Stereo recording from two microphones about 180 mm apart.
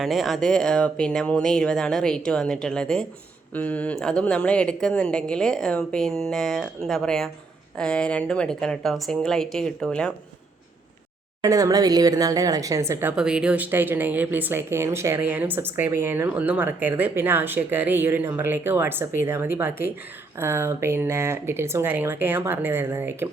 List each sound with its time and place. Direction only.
0.0 s speech: centre (ahead or behind)
11.4 s a woman's voice: 20° right (ahead or behind)